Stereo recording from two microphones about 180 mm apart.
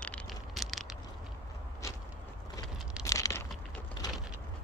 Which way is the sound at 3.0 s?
20° left (ahead or behind).